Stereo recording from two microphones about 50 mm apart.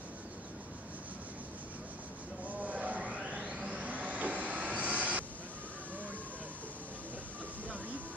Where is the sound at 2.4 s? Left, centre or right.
Right.